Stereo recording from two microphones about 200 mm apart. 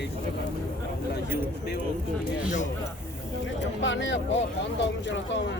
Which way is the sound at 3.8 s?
65° left (ahead or behind).